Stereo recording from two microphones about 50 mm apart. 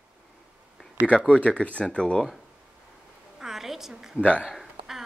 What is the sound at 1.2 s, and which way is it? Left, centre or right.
Speech, left.